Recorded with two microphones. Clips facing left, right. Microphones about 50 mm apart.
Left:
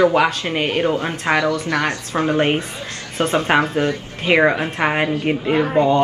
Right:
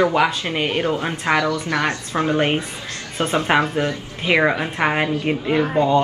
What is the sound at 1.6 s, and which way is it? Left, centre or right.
Speech, left.